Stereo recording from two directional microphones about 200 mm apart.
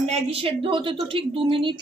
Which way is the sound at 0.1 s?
30° right (ahead or behind).